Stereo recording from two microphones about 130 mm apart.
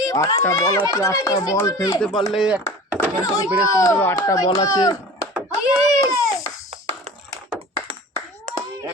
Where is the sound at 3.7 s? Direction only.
25° left (ahead or behind).